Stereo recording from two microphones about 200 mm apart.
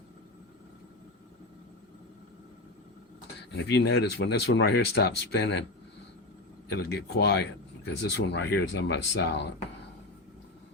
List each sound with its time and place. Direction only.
3.5 s speech: 55° left (ahead or behind)
6.7 s speech: 55° left (ahead or behind)